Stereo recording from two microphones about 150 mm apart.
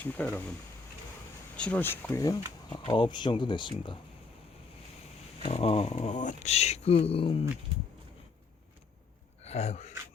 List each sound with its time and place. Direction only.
0.0 s speech: 10° left (ahead or behind)
1.5 s speech: 10° left (ahead or behind); by 3.9 s 35° left (ahead or behind)
5.4 s speech: 40° left (ahead or behind)
9.4 s speech: 45° left (ahead or behind)